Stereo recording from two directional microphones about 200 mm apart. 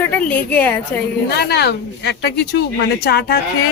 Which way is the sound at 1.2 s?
55° left (ahead or behind).